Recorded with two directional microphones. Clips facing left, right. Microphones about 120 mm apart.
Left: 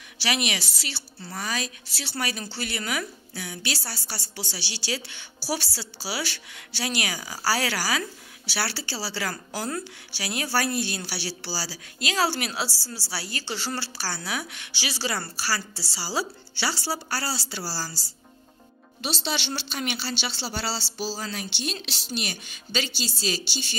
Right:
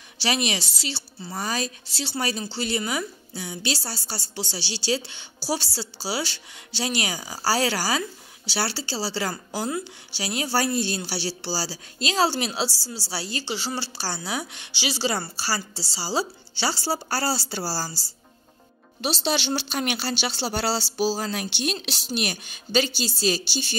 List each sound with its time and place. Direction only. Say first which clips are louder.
0.2 s a woman's voice: right 2 dB; 30° right (ahead or behind)
18.9 s a woman's voice: right 5 dB; 40° right (ahead or behind)